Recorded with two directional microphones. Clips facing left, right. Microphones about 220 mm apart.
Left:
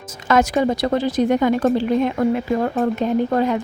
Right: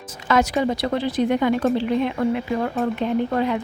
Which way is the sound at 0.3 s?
45° left (ahead or behind).